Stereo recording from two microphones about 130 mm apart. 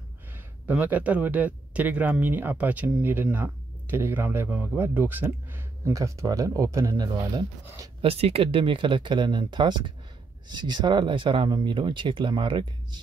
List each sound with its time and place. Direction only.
0.7 s speech: 10° right (ahead or behind)
8.0 s speech: 50° right (ahead or behind)